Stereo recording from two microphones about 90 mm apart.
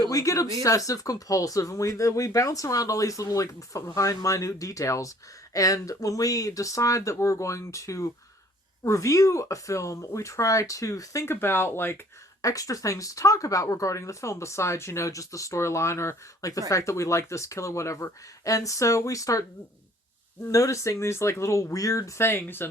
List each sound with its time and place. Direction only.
0.0 s speech: 40° left (ahead or behind)
12.4 s speech: 40° left (ahead or behind)